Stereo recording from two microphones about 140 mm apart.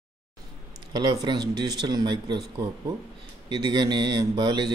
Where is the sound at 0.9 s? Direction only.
30° right (ahead or behind).